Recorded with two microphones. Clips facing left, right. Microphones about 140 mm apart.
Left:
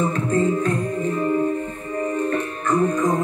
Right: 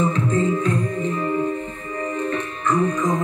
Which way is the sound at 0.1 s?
45° left (ahead or behind).